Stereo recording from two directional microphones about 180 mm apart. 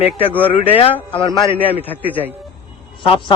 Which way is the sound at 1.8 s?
10° left (ahead or behind).